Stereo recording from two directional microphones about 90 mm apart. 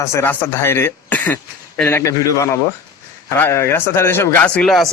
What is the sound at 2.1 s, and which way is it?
A man's voice, 35° left (ahead or behind).